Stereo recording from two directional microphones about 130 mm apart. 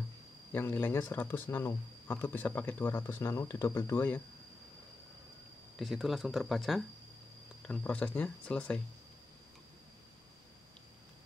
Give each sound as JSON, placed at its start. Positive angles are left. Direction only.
{"t": 0.5, "sound": "speech", "side_deg": 15}
{"t": 5.8, "sound": "speech", "side_deg": 0}